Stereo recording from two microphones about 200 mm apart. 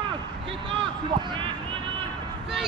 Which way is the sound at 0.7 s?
25° right (ahead or behind).